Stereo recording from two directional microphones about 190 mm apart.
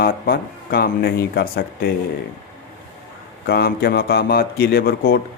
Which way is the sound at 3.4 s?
55° left (ahead or behind).